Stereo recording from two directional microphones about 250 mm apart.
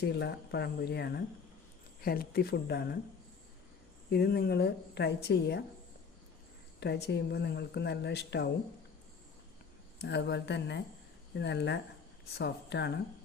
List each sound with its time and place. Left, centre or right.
0.0 s speech: left
4.1 s speech: left
6.7 s speech: left
10.0 s speech: left